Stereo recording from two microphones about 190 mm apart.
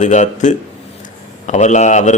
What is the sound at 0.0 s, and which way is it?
Speech, 40° left (ahead or behind).